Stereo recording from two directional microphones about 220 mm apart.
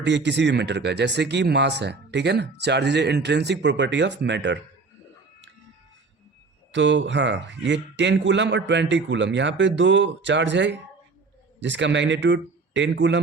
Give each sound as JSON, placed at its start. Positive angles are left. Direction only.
{"t": 0.0, "sound": "speech", "side_deg": -55}
{"t": 6.7, "sound": "speech", "side_deg": -55}